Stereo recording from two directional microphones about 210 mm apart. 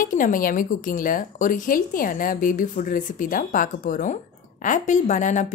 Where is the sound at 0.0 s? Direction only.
40° left (ahead or behind).